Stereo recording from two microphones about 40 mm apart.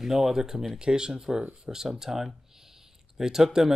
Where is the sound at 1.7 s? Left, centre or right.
Centre.